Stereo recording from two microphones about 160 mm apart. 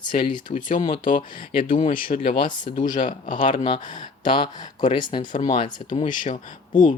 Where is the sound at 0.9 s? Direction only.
55° left (ahead or behind).